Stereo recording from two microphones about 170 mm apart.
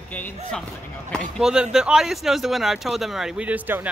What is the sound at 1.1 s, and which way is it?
Speech, 5° right (ahead or behind).